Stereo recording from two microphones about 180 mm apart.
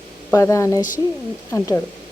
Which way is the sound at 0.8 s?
45° left (ahead or behind).